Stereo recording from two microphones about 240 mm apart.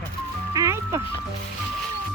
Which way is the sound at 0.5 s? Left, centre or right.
Centre.